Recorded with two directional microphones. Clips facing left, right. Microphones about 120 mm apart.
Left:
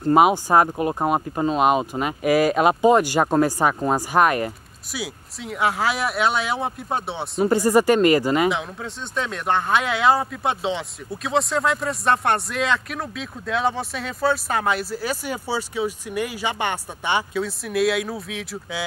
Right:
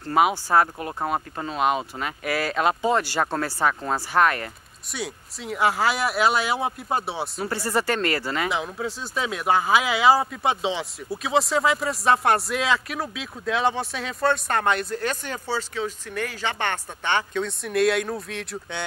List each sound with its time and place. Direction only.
0.0 s speech: 20° left (ahead or behind)
4.9 s speech: centre (ahead or behind)
7.3 s speech: 20° left (ahead or behind)
8.5 s speech: centre (ahead or behind)